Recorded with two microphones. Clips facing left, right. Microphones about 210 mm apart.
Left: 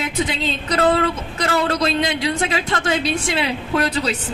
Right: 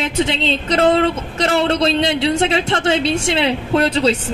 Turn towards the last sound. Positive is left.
turn(degrees=-25)  # may be behind; listen again after turning